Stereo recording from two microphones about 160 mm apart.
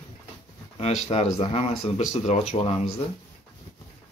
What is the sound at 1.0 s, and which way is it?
Speech, 40° left (ahead or behind).